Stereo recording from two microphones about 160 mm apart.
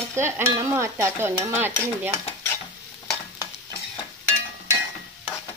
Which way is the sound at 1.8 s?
10° left (ahead or behind).